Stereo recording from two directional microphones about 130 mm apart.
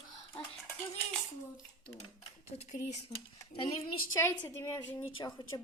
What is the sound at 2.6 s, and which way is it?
Speech, 65° left (ahead or behind).